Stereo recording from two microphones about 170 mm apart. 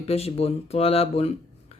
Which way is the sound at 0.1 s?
35° left (ahead or behind).